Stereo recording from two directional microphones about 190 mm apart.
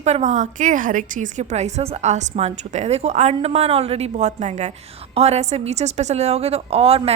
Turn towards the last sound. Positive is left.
turn(degrees=-30)  # may be behind; listen again after turning